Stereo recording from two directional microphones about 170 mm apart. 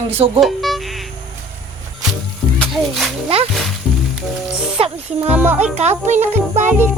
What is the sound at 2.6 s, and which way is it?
Speech, centre (ahead or behind).